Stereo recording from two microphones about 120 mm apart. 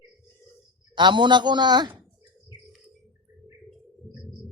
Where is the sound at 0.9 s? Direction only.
40° right (ahead or behind).